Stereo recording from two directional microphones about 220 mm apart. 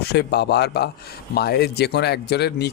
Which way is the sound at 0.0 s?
45° left (ahead or behind).